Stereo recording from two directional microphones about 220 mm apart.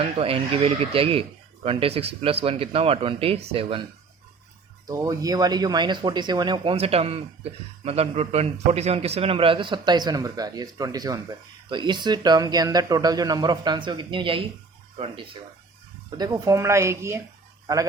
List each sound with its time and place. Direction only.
0.0 s a man's voice: 25° right (ahead or behind)
4.9 s a man's voice: 15° right (ahead or behind)